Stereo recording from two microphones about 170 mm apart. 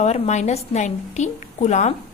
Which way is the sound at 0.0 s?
40° left (ahead or behind).